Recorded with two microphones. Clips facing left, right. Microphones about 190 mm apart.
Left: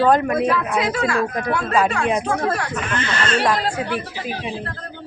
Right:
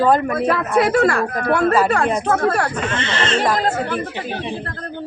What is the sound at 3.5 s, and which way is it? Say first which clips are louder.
Speech: right 2 dB; 45° right (ahead or behind).